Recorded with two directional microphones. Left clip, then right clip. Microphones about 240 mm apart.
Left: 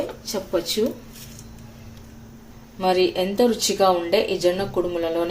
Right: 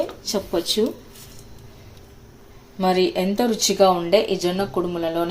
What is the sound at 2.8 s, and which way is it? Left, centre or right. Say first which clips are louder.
Speech: even; centre.